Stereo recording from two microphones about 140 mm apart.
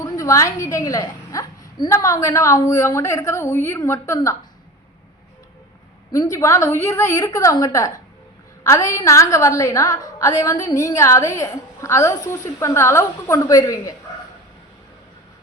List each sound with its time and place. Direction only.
0.0 s a woman's voice: 25° left (ahead or behind)
6.1 s a woman's voice: 25° left (ahead or behind)